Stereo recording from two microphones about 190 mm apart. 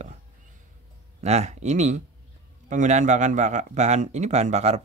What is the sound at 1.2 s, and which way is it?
Speech, 35° right (ahead or behind).